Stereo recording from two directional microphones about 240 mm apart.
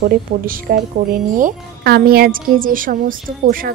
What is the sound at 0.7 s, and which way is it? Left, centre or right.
Speech, right.